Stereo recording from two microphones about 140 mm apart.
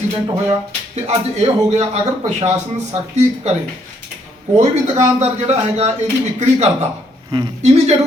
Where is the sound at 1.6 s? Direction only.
50° right (ahead or behind).